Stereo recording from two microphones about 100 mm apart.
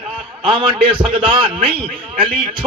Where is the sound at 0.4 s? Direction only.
55° right (ahead or behind).